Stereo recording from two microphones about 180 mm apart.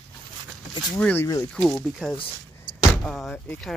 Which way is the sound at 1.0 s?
10° left (ahead or behind).